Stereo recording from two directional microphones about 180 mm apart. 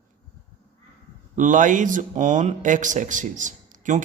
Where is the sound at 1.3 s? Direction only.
45° right (ahead or behind).